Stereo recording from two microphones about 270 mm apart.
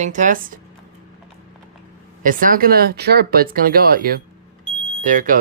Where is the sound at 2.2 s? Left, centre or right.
Right.